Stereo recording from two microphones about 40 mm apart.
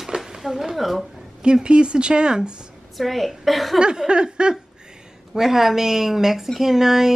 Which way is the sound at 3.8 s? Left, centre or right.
Right.